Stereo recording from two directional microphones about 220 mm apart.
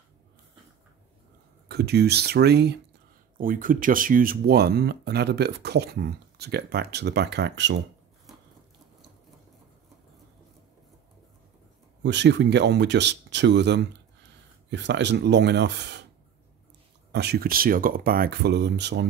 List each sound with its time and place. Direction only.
1.7 s speech: 45° right (ahead or behind)
3.3 s speech: 40° right (ahead or behind)
12.0 s speech: 50° right (ahead or behind)
17.1 s speech: 50° right (ahead or behind)